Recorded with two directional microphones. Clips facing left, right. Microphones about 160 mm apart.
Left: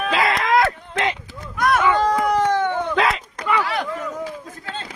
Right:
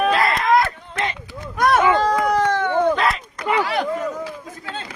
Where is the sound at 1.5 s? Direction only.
30° right (ahead or behind).